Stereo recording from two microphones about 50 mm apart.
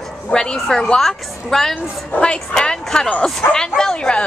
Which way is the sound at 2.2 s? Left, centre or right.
Centre.